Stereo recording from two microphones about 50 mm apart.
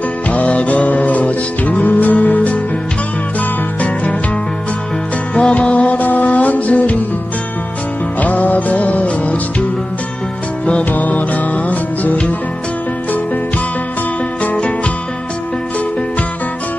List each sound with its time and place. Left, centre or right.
0.3 s music: left
5.3 s music: left
8.2 s music: left
10.7 s music: left
14.4 s music: left